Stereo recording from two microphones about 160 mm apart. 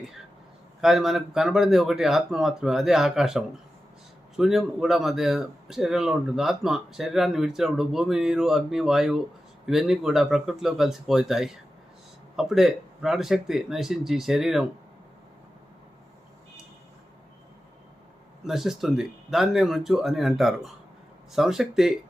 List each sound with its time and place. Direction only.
0.8 s speech: centre (ahead or behind)
18.4 s speech: centre (ahead or behind)